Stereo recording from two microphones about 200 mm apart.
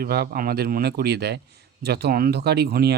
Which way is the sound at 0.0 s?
50° right (ahead or behind).